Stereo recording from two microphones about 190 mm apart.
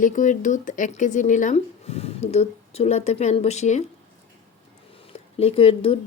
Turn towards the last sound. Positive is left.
turn(degrees=30)  # may be behind; listen again after turning